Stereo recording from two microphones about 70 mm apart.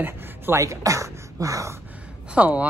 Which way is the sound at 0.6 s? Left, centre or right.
Right.